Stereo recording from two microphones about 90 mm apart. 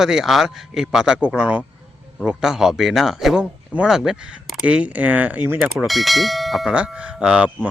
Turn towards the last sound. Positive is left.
turn(degrees=-10)  # may be behind; listen again after turning